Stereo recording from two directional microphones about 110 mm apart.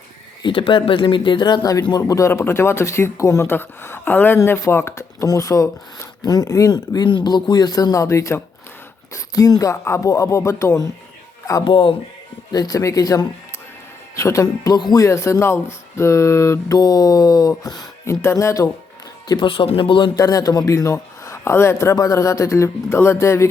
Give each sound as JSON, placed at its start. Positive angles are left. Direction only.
{"t": 0.4, "sound": "speech", "side_deg": 50}
{"t": 11.6, "sound": "speech", "side_deg": 50}
{"t": 12.5, "sound": "speech", "side_deg": 35}
{"t": 19.3, "sound": "speech", "side_deg": 50}
{"t": 20.1, "sound": "speech", "side_deg": 35}